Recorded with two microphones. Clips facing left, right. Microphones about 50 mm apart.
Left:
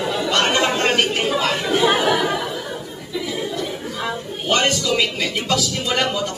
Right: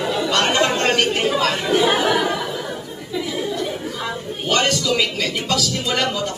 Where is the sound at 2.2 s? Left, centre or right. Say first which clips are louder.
Even; centre.